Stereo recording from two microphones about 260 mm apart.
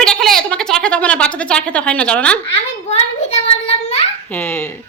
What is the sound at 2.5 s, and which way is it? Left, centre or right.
Child singing, left.